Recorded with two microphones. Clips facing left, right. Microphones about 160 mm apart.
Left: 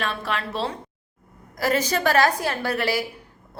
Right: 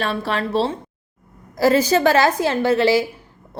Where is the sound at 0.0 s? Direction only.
35° right (ahead or behind).